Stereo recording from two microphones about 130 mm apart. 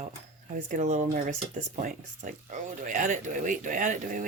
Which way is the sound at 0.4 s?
85° right.